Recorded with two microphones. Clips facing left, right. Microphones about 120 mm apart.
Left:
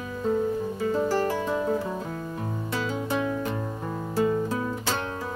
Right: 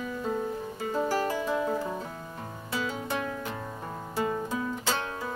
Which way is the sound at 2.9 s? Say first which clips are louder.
Left 7 dB; centre (ahead or behind).